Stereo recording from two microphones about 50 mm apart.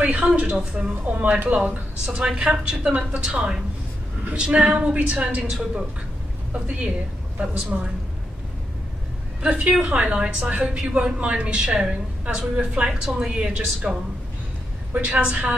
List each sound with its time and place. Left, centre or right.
0.0 s a woman's voice: right
2.0 s a woman's voice: centre
2.9 s a woman's voice: right
4.4 s a woman's voice: centre
6.5 s a woman's voice: right
9.4 s a woman's voice: right
14.9 s a woman's voice: right
15.1 s a woman's voice: right